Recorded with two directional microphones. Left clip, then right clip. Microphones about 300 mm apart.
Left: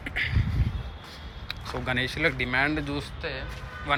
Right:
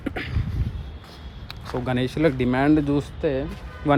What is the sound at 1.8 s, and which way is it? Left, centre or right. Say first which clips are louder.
Speech: right 4 dB; centre.